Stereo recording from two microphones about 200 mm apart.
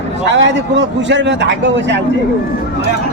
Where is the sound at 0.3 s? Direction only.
60° right (ahead or behind).